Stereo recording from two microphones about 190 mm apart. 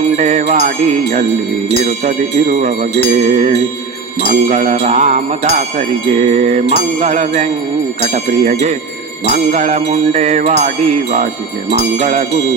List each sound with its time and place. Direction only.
0.2 s speech: 35° right (ahead or behind)
11.7 s speech: 35° right (ahead or behind)